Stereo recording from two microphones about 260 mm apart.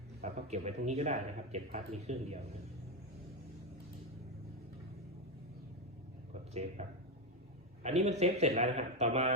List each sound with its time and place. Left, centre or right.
0.2 s speech: right
6.5 s speech: right